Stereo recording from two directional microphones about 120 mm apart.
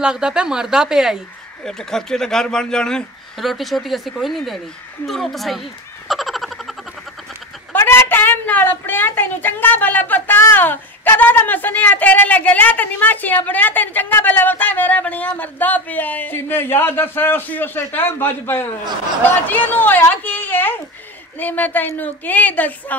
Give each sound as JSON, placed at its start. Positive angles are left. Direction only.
{"t": 0.0, "sound": "speech", "side_deg": -5}
{"t": 5.0, "sound": "a sound", "side_deg": 0}
{"t": 7.7, "sound": "a woman's voice", "side_deg": 20}